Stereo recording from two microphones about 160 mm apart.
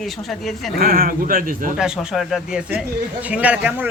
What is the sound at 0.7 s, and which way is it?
Speech, 65° right (ahead or behind).